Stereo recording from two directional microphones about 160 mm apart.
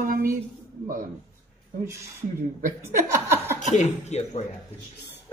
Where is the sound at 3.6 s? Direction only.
50° left (ahead or behind).